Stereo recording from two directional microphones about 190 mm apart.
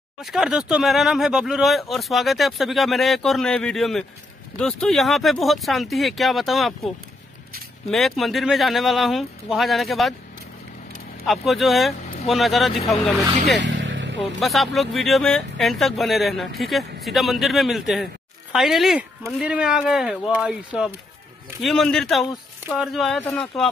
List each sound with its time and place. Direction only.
0.2 s speech: centre (ahead or behind)
7.9 s speech: centre (ahead or behind)
11.2 s speech: centre (ahead or behind)
13.6 s vehicle: 75° right (ahead or behind)
14.4 s speech: centre (ahead or behind)